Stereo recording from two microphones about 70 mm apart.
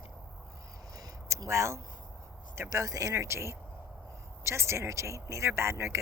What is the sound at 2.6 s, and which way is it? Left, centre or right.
Speech, right.